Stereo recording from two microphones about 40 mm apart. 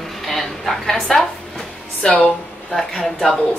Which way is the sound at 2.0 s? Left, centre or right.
Left.